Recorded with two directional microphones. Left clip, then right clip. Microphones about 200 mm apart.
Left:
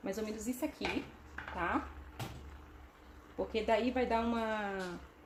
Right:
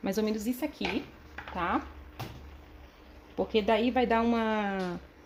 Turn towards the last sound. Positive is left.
turn(degrees=-45)  # may be behind; listen again after turning